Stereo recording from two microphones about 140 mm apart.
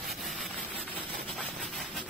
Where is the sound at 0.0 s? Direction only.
Centre (ahead or behind).